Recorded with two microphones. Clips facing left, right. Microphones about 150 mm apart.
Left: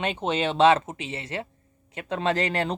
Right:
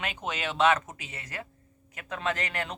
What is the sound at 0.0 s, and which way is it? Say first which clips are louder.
Speech: left 8 dB; 30° left (ahead or behind).